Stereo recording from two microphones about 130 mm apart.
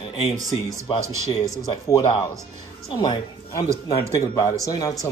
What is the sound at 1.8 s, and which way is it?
A woman's voice, 25° left (ahead or behind).